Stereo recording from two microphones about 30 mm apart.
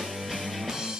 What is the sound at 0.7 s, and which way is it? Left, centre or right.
Music, centre.